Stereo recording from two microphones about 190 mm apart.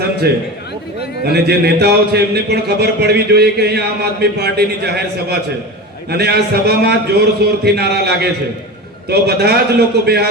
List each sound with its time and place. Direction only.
0.2 s a man's voice: 55° right (ahead or behind)